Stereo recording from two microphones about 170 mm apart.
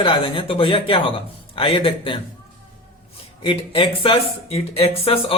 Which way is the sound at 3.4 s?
30° left (ahead or behind).